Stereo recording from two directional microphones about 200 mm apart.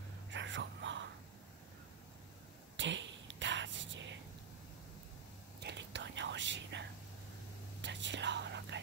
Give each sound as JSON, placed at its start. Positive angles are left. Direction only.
{"t": 0.3, "sound": "a sound", "side_deg": -65}
{"t": 2.8, "sound": "whispering", "side_deg": -65}
{"t": 5.6, "sound": "whispering", "side_deg": -60}